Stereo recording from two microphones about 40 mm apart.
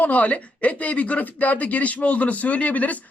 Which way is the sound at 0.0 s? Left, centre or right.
Left.